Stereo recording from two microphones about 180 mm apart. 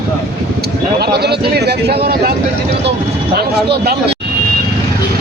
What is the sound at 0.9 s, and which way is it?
Speech, 60° right (ahead or behind).